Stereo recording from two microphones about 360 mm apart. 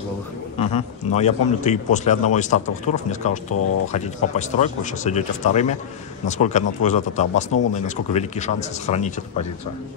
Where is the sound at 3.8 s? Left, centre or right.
Centre.